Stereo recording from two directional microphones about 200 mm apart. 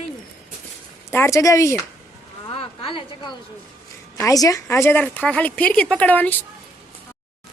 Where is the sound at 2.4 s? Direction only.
25° left (ahead or behind); by 6.4 s 10° left (ahead or behind).